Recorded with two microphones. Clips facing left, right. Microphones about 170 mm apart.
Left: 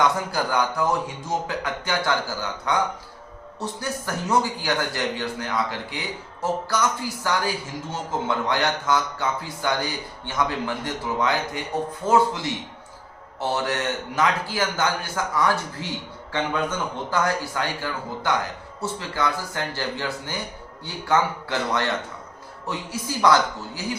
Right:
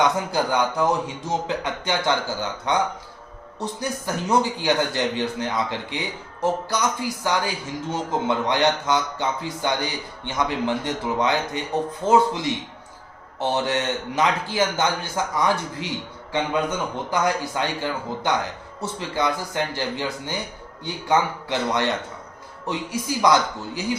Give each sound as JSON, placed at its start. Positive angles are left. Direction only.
{"t": 0.0, "sound": "a man's voice", "side_deg": -20}